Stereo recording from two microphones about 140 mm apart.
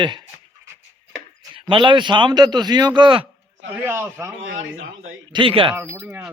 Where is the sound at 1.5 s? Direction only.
35° right (ahead or behind).